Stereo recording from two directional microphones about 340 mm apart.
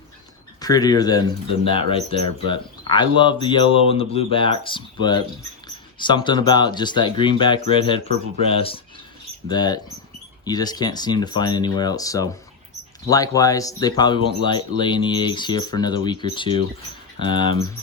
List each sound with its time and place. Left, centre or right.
0.6 s speech: centre